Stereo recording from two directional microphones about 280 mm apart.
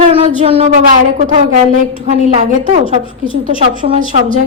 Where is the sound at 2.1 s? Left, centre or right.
Right.